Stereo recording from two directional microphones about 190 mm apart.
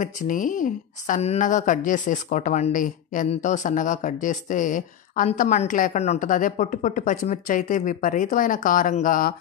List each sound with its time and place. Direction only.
0.0 s speech: 45° left (ahead or behind)